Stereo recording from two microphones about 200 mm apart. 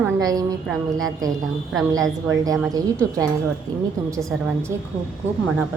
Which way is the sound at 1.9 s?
20° right (ahead or behind).